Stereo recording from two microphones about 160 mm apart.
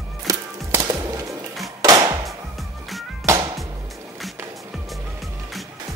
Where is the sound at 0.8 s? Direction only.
25° right (ahead or behind).